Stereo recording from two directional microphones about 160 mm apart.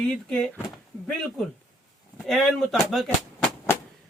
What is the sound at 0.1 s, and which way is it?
Speech, 5° left (ahead or behind).